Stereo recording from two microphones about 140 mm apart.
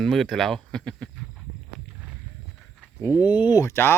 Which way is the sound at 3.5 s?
20° left (ahead or behind).